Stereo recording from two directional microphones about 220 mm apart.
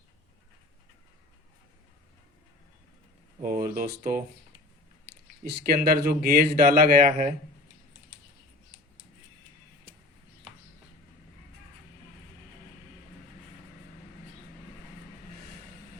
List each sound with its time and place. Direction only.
3.4 s a man's voice: 40° right (ahead or behind)
5.4 s a man's voice: 40° right (ahead or behind)